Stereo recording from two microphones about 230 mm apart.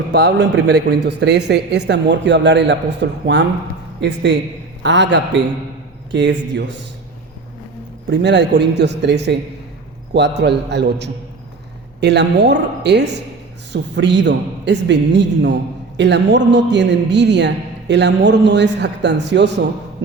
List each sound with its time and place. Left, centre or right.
0.1 s a man's voice: right
8.2 s a man's voice: right